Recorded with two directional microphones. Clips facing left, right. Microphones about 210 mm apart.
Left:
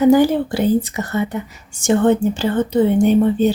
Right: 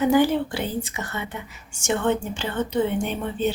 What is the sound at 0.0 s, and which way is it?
Speech, 40° left (ahead or behind).